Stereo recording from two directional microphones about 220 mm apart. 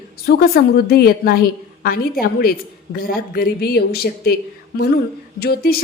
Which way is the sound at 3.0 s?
45° left (ahead or behind).